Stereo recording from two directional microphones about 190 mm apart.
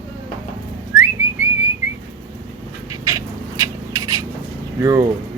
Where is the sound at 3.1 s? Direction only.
15° right (ahead or behind).